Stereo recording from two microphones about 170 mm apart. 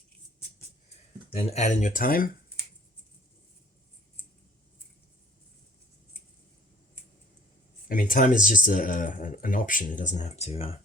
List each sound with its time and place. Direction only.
1.3 s speech: 35° left (ahead or behind); by 2.3 s 55° left (ahead or behind)
7.9 s speech: 55° left (ahead or behind); by 10.8 s 35° left (ahead or behind)